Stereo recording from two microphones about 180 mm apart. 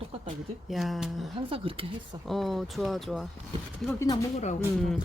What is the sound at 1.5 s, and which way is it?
Speech, 30° right (ahead or behind).